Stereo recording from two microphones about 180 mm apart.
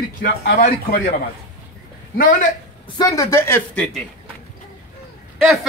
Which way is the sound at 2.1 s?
50° left (ahead or behind).